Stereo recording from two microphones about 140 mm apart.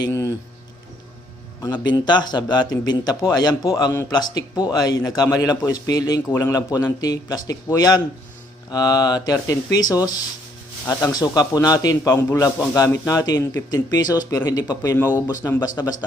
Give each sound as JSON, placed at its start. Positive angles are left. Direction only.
{"t": 0.0, "sound": "speech", "side_deg": 20}
{"t": 1.6, "sound": "a man's voice", "side_deg": 30}
{"t": 14.9, "sound": "speech", "side_deg": 15}
{"t": 15.6, "sound": "a man's voice", "side_deg": 25}